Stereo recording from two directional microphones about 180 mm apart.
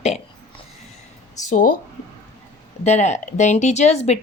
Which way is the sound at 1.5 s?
50° left (ahead or behind).